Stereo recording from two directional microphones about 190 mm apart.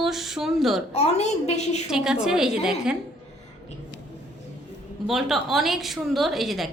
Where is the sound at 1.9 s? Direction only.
5° right (ahead or behind).